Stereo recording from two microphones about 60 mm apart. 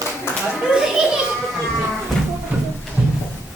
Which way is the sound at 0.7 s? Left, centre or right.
Centre.